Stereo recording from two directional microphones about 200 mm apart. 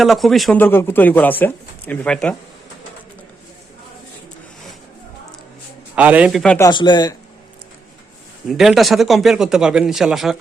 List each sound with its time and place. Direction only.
0.0 s speech: centre (ahead or behind)
6.0 s speech: 5° right (ahead or behind)
6.6 s speech: 20° left (ahead or behind)
8.4 s speech: centre (ahead or behind)